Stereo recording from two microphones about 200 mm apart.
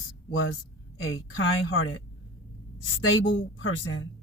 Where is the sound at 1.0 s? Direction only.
90° left; by 2.0 s 75° left (ahead or behind).